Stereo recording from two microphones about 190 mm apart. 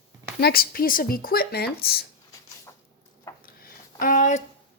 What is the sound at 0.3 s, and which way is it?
Speech, 55° left (ahead or behind).